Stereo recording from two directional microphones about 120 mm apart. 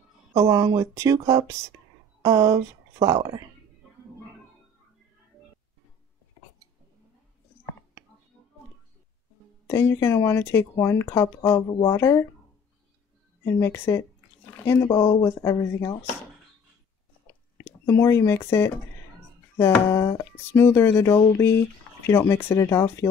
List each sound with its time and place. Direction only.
0.3 s speech: 30° right (ahead or behind)
9.7 s speech: 20° left (ahead or behind)
13.5 s speech: 20° left (ahead or behind)
17.6 s speech: 20° left (ahead or behind)